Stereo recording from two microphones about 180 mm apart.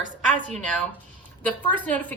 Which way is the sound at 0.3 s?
45° right (ahead or behind).